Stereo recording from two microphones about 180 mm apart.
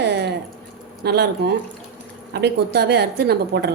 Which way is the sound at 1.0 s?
65° right (ahead or behind).